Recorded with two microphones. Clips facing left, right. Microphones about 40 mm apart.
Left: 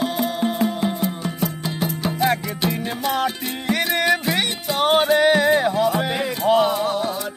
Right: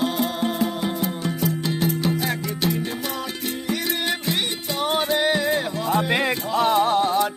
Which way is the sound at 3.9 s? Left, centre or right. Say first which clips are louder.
Left 8 dB; left.